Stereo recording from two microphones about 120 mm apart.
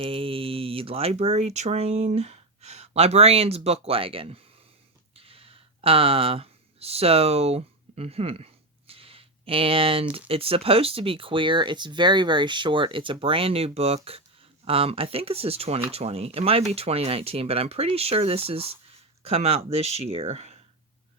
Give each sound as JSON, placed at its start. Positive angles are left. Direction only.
{"t": 0.0, "sound": "speech", "side_deg": -50}
{"t": 5.1, "sound": "a sound", "side_deg": -50}
{"t": 8.9, "sound": "speech", "side_deg": -50}